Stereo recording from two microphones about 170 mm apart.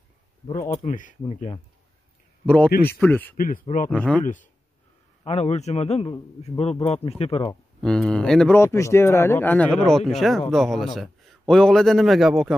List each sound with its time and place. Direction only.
0.5 s speech: 20° left (ahead or behind)
0.8 s speech: 50° left (ahead or behind)
1.3 s a man's voice: 35° left (ahead or behind)
2.4 s a man's voice: 5° left (ahead or behind)
3.3 s speech: 55° left (ahead or behind)
3.9 s a man's voice: 5° left (ahead or behind)
5.2 s a man's voice: 40° left (ahead or behind)
7.8 s a man's voice: 5° left (ahead or behind)